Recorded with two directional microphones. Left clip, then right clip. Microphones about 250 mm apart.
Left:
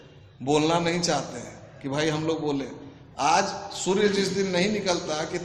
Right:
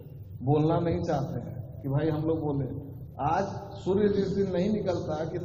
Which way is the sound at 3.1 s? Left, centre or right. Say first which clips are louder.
Left 6 dB; left.